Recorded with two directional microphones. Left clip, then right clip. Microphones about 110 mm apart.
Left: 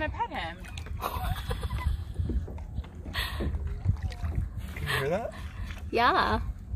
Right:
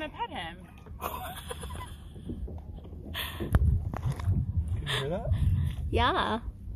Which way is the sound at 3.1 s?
Centre (ahead or behind).